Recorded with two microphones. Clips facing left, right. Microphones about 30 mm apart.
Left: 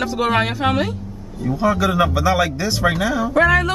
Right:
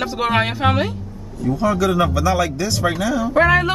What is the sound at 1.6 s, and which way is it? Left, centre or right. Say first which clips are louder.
A man's voice: left 1 dB; centre.